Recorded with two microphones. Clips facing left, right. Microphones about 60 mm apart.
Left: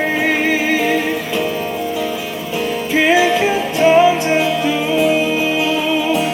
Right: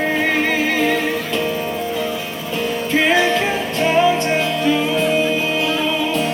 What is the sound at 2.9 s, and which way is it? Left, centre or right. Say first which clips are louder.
Music: left 3 dB; centre.